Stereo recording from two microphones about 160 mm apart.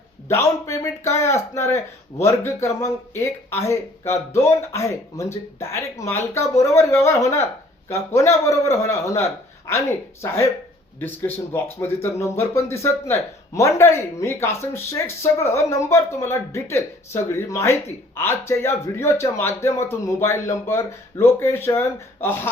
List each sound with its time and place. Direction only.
0.3 s speech: 20° left (ahead or behind)